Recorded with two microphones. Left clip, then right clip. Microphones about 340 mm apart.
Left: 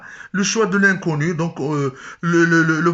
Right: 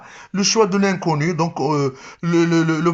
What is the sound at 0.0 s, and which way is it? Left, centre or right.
Speech, centre.